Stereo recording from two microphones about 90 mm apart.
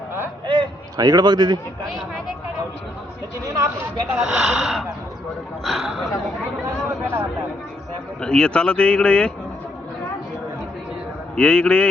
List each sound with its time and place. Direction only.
0.4 s a sound: 55° right (ahead or behind)
3.4 s speech: 40° right (ahead or behind)
4.2 s speech: 5° right (ahead or behind)
6.8 s a sound: 25° right (ahead or behind)
8.2 s speech: 10° left (ahead or behind)
11.3 s speech: 10° left (ahead or behind)